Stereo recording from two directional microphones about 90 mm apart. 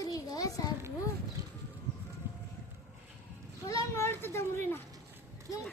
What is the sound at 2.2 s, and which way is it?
Boat, 25° right (ahead or behind).